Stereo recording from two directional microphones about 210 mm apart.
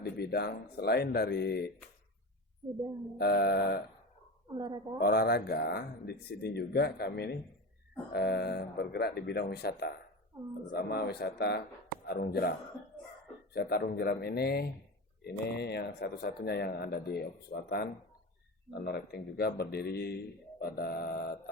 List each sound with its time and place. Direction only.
0.0 s a man's voice: 50° left (ahead or behind)
3.2 s a man's voice: 50° left (ahead or behind)
4.5 s a woman's voice: 20° right (ahead or behind)
4.9 s a man's voice: 50° left (ahead or behind)